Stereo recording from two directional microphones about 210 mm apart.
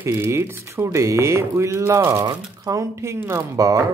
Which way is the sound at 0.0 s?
10° right (ahead or behind).